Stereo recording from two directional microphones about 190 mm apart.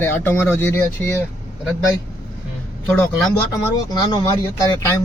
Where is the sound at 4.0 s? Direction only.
20° left (ahead or behind).